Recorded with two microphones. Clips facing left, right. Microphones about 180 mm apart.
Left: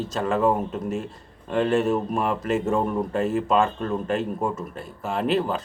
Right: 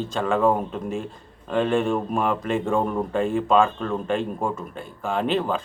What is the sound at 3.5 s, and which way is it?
Speech, 40° left (ahead or behind).